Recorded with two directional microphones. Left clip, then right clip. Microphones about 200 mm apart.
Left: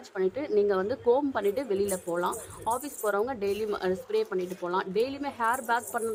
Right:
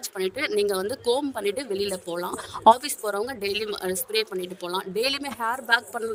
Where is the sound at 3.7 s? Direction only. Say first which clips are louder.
Right 1 dB; centre (ahead or behind).